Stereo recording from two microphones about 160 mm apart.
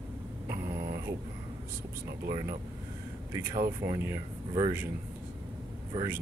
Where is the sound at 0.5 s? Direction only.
20° right (ahead or behind).